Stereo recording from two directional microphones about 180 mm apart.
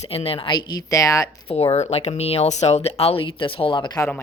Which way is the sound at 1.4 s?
35° left (ahead or behind).